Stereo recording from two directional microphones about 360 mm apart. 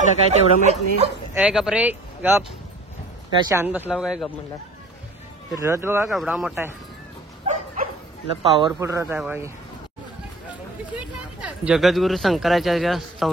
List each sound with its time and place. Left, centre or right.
0.3 s speech: centre
1.3 s speech: centre
5.5 s speech: centre
7.4 s bow-wow: centre
8.4 s speech: centre
11.6 s speech: centre